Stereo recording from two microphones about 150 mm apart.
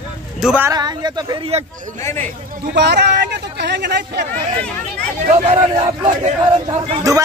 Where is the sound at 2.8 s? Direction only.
90° right.